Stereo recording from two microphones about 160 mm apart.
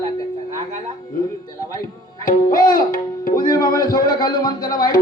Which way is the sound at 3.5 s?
25° left (ahead or behind).